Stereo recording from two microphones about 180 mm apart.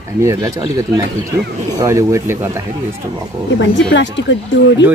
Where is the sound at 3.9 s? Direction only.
80° left.